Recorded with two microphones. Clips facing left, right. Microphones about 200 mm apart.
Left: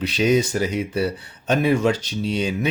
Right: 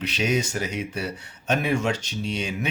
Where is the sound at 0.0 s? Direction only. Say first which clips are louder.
Left 6 dB; 35° left (ahead or behind).